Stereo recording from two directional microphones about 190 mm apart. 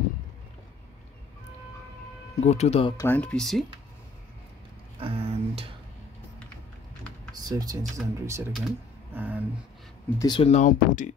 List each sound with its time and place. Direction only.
2.4 s speech: 35° left (ahead or behind)
3.0 s speech: 10° left (ahead or behind)
4.9 s music: 30° right (ahead or behind)
7.4 s speech: 20° right (ahead or behind)
9.1 s a sound: 10° right (ahead or behind)
10.0 s speech: 20° left (ahead or behind)
10.5 s speech: 40° left (ahead or behind)